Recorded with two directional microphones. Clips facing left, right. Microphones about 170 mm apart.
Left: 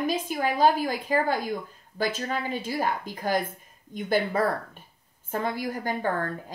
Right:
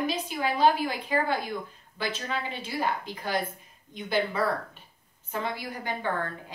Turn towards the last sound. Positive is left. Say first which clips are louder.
# left 3 dB
turn(degrees=45)  # may be behind; listen again after turning